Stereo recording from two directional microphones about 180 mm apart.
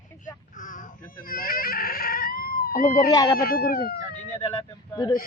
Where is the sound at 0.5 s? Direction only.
45° left (ahead or behind).